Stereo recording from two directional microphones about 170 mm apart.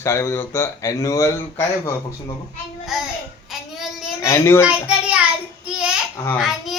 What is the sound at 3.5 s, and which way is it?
Child singing, centre (ahead or behind).